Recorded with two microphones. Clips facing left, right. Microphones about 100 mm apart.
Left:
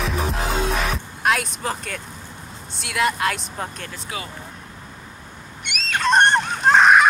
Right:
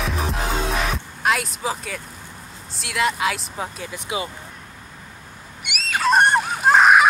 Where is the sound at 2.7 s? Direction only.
Centre (ahead or behind).